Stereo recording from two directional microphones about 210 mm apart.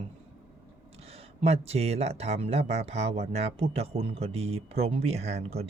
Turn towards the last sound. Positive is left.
turn(degrees=-30)  # may be behind; listen again after turning